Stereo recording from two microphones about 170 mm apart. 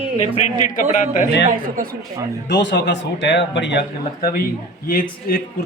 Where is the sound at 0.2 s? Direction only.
40° left (ahead or behind).